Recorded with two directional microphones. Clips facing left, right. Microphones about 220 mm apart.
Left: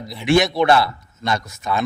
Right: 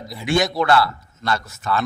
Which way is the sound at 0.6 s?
20° left (ahead or behind).